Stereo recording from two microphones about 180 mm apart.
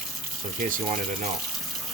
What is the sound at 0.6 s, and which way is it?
Speech, 50° right (ahead or behind).